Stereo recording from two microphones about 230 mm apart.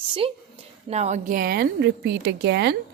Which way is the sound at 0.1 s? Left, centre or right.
Right.